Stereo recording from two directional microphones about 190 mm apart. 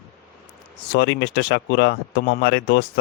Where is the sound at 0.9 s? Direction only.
65° left (ahead or behind).